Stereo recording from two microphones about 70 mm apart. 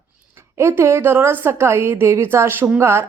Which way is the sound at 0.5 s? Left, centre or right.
Right.